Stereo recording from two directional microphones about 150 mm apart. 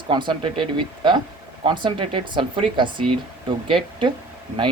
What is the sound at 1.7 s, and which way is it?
Speech, 35° right (ahead or behind).